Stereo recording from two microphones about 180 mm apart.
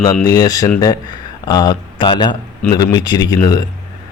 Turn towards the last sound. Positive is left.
turn(degrees=20)  # may be behind; listen again after turning